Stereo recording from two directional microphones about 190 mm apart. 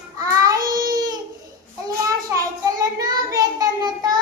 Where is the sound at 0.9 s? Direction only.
20° right (ahead or behind).